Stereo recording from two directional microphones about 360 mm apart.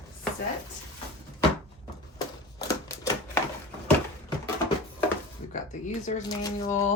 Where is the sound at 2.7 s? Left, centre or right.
Centre.